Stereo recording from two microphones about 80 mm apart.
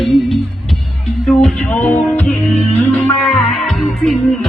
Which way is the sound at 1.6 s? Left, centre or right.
Left.